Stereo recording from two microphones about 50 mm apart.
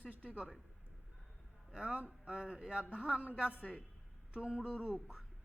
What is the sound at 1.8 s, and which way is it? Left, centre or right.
Speech, right.